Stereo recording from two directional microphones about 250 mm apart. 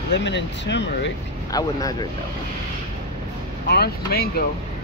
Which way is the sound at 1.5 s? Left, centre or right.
Centre.